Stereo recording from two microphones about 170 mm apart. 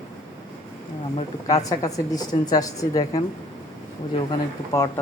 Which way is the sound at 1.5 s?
20° left (ahead or behind).